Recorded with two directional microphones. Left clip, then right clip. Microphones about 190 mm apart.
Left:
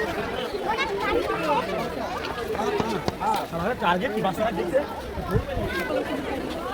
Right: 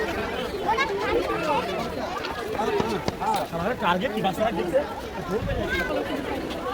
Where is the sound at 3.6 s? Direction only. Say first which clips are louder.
Left 1 dB; 50° left (ahead or behind).